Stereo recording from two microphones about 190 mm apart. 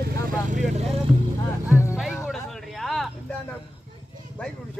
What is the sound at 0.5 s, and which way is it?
Speech, 40° right (ahead or behind).